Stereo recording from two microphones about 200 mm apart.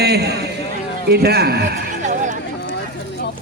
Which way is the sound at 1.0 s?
50° right (ahead or behind).